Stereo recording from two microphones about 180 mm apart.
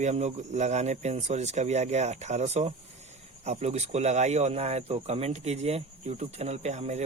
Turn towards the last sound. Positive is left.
turn(degrees=-40)  # may be behind; listen again after turning